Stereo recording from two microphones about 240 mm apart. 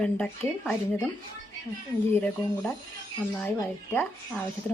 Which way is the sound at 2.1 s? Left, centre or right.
Centre.